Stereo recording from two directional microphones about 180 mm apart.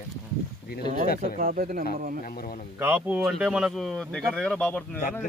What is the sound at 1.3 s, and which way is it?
Speech, 50° right (ahead or behind).